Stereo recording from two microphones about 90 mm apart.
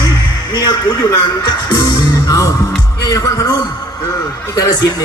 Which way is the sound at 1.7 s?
45° left (ahead or behind).